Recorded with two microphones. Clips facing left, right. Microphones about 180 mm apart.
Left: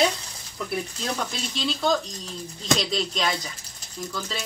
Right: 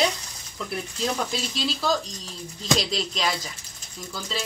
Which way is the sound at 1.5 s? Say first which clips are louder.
Left 3 dB; centre (ahead or behind).